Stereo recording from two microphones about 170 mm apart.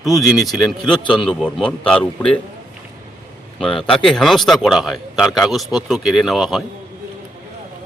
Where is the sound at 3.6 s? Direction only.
5° left (ahead or behind).